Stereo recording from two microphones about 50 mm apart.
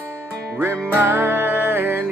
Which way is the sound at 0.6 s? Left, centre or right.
Right.